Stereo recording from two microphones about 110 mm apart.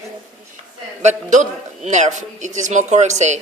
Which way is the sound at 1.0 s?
90° right.